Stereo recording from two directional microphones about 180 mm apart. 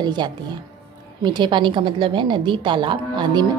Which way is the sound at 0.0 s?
25° right (ahead or behind).